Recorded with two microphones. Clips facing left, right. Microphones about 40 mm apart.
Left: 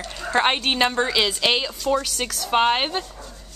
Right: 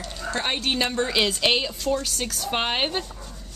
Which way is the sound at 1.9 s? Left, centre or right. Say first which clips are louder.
Left 4 dB; left.